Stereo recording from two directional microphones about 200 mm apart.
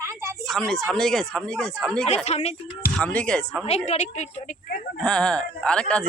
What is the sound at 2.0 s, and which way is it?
Speech, 35° left (ahead or behind).